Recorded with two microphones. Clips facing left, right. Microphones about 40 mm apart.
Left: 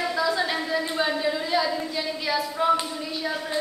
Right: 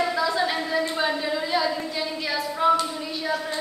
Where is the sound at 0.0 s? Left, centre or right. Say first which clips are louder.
Right 1 dB; centre.